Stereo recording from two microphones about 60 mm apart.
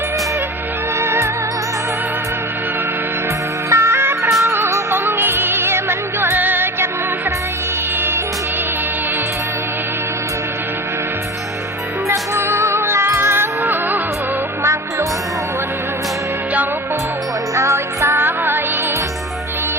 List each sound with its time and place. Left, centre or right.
0.9 s music: right
3.7 s music: right
4.3 s music: right
4.5 s music: right
12.0 s music: right
14.6 s music: right
17.5 s music: right
18.2 s music: right